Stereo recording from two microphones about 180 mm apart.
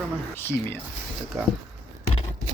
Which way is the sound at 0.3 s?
10° left (ahead or behind).